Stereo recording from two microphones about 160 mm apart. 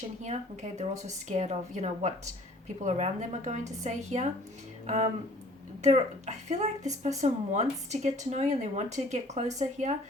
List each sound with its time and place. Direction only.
0.2 s speech: 45° right (ahead or behind)
5.8 s speech: 45° right (ahead or behind)